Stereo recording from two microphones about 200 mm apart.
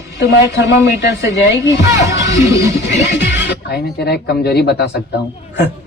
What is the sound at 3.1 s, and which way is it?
Speech, 60° left (ahead or behind).